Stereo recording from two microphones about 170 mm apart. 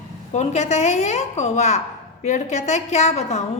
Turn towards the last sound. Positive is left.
turn(degrees=40)  # may be behind; listen again after turning